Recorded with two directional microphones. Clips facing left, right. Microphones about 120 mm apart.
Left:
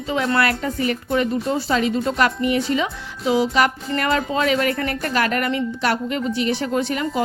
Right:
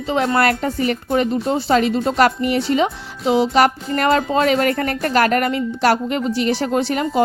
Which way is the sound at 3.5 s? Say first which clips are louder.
Right 4 dB; 40° right (ahead or behind).